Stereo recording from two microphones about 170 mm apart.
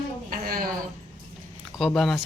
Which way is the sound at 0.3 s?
55° right (ahead or behind).